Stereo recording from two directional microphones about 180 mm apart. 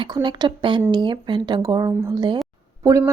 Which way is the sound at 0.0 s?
25° right (ahead or behind).